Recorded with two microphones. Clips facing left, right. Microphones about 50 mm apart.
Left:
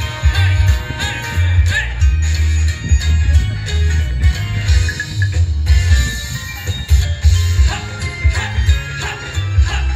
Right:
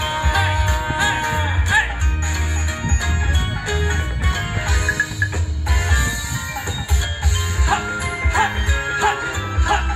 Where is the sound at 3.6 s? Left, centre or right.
Right.